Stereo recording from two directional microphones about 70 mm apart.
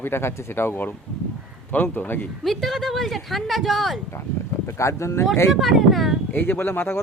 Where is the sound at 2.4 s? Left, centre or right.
Centre.